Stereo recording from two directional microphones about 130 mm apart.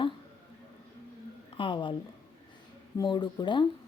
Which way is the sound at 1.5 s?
40° left (ahead or behind).